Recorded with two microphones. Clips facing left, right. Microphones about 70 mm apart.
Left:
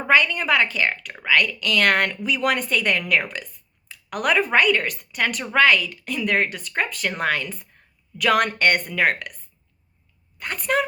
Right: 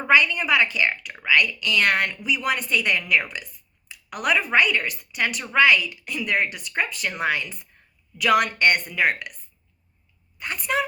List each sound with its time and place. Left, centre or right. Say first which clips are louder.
0.1 s speech: even; left
10.3 s a woman's voice: left 2 dB; left